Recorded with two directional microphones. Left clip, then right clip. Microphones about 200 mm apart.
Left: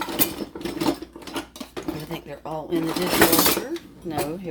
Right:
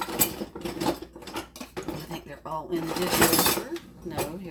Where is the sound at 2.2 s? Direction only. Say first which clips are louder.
Left 1 dB; 55° left (ahead or behind).